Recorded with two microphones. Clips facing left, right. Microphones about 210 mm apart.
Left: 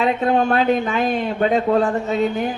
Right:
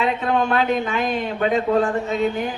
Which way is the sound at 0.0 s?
40° left (ahead or behind).